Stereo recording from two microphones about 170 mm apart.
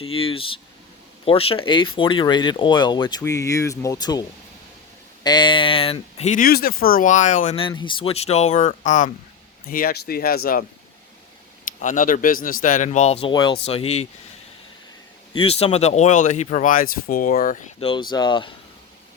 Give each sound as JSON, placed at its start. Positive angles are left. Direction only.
{"t": 0.0, "sound": "speech", "side_deg": 35}
{"t": 7.5, "sound": "speech", "side_deg": 30}
{"t": 9.6, "sound": "speech", "side_deg": 60}
{"t": 11.8, "sound": "speech", "side_deg": 50}
{"t": 13.3, "sound": "speech", "side_deg": 25}
{"t": 15.3, "sound": "speech", "side_deg": 30}
{"t": 17.7, "sound": "speech", "side_deg": 30}